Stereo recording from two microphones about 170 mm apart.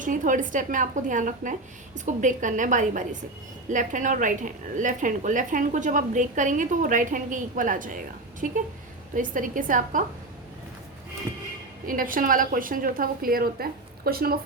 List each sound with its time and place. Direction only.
0.0 s a woman's voice: 50° right (ahead or behind)
11.9 s a woman's voice: 55° right (ahead or behind)